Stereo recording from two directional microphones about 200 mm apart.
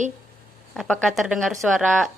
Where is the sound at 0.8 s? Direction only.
5° left (ahead or behind).